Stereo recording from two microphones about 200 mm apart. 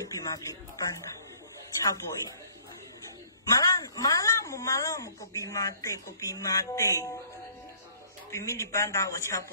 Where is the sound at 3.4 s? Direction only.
20° left (ahead or behind).